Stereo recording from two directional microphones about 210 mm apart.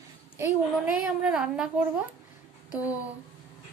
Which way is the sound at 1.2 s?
5° right (ahead or behind).